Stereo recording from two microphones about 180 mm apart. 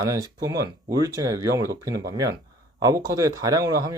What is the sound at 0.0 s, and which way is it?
Speech, 20° right (ahead or behind).